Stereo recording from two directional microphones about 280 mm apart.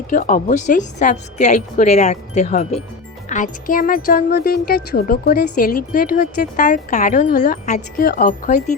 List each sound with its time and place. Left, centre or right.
0.1 s speech: left